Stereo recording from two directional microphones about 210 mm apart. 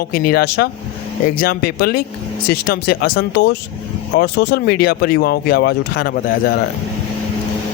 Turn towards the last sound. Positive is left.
turn(degrees=45)  # may be behind; listen again after turning